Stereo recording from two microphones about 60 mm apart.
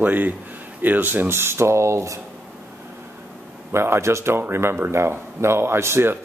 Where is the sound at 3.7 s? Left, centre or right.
Right.